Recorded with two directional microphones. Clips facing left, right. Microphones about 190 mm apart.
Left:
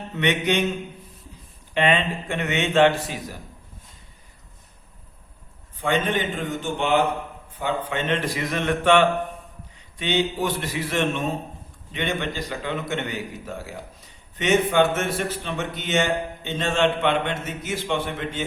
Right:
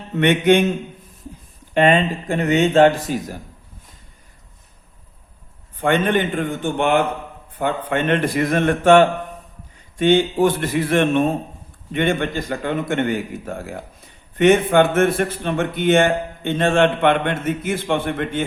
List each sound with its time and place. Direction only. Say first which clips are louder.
0.2 s speech: right 8 dB; 55° right (ahead or behind)
1.7 s a man's voice: right 6 dB; 45° right (ahead or behind)
5.7 s a man's voice: right 5 dB; 55° right (ahead or behind)